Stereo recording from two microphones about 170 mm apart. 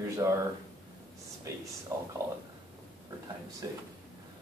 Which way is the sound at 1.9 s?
15° right (ahead or behind).